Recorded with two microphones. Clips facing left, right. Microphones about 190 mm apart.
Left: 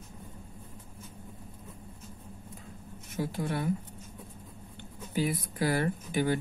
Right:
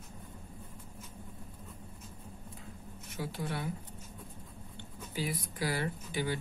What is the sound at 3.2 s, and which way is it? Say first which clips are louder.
Speech: left 5 dB; 50° left (ahead or behind).